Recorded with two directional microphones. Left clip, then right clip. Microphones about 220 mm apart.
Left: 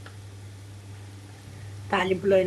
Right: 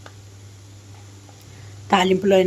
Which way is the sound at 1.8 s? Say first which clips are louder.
Right 6 dB; 40° right (ahead or behind).